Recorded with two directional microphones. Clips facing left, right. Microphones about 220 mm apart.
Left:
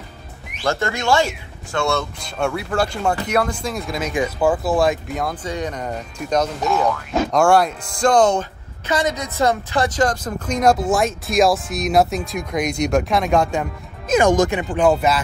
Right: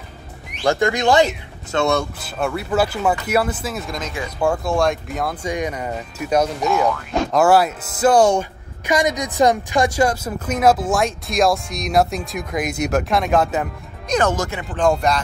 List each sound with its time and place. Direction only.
0.7 s speech: 15° right (ahead or behind)
2.1 s speech: 5° right (ahead or behind)
4.0 s speech: 15° left (ahead or behind)
4.4 s speech: 5° left (ahead or behind)
14.1 s speech: 15° left (ahead or behind)